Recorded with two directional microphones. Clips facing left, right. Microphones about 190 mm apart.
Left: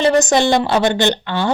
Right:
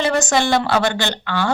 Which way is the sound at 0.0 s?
20° left (ahead or behind).